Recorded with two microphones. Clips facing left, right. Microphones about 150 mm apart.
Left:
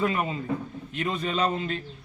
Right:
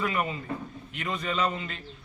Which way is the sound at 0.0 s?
30° left (ahead or behind).